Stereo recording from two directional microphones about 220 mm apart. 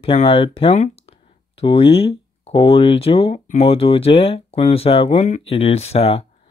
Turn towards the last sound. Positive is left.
turn(degrees=30)  # may be behind; listen again after turning